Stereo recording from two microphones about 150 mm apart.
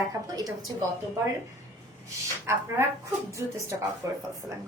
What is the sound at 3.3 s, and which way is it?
A woman's voice, 20° right (ahead or behind).